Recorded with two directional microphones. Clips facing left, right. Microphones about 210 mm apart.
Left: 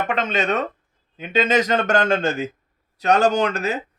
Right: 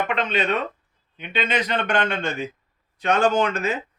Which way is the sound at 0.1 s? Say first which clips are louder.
Left 1 dB; 45° left (ahead or behind).